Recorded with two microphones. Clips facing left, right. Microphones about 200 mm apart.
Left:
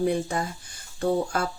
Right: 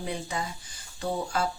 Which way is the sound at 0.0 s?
50° left (ahead or behind).